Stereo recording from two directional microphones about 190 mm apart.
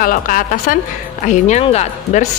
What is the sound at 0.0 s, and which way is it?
A woman's voice, 45° left (ahead or behind).